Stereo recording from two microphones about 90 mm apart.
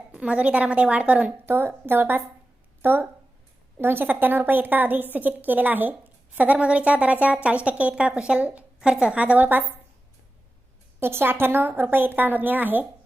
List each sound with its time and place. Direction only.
0.1 s a woman's voice: 15° right (ahead or behind)
11.0 s a woman's voice: 25° right (ahead or behind)